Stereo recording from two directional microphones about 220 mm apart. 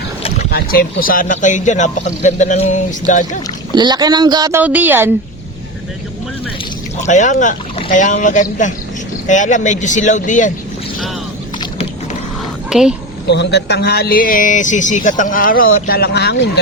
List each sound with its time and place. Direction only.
0.2 s boat: 25° left (ahead or behind)
0.5 s speech: 40° left (ahead or behind)
3.7 s speech: 20° right (ahead or behind)
7.1 s speech: 35° left (ahead or behind)
12.7 s speech: centre (ahead or behind)
13.2 s speech: 50° left (ahead or behind)